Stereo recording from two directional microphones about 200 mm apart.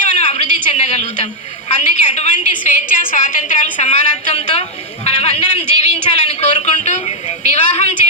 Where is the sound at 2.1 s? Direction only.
35° left (ahead or behind).